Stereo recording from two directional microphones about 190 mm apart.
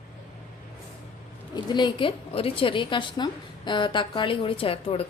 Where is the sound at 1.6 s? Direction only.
25° left (ahead or behind).